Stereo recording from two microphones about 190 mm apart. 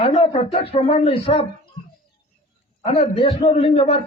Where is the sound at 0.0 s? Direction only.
30° left (ahead or behind).